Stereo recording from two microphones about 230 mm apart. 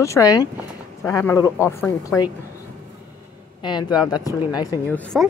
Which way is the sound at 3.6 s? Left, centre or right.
Centre.